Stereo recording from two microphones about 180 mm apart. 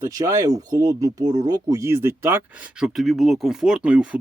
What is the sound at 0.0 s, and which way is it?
Speech, 20° right (ahead or behind).